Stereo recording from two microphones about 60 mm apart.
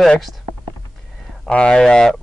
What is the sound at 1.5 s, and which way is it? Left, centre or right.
Speech, centre.